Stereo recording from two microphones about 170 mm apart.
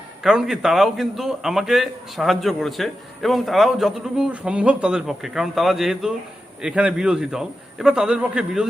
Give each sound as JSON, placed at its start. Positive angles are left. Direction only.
{"t": 0.2, "sound": "a man's voice", "side_deg": -5}